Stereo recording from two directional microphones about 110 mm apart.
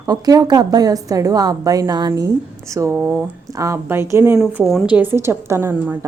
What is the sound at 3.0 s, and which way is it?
A woman's voice, 15° right (ahead or behind).